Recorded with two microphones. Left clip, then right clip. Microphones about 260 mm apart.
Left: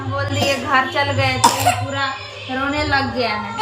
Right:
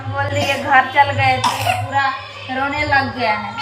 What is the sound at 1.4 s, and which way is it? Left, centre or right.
Cough, left.